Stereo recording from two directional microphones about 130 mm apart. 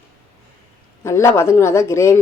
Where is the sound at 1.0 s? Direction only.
20° left (ahead or behind).